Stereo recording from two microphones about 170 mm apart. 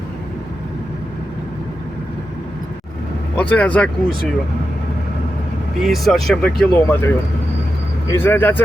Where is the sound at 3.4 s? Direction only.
10° left (ahead or behind).